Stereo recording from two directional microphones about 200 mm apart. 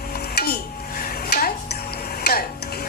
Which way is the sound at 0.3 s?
50° left (ahead or behind).